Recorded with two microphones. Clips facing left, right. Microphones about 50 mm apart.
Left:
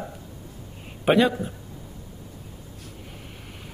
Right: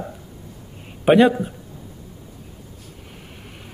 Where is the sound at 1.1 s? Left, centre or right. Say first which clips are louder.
Right 6 dB; right.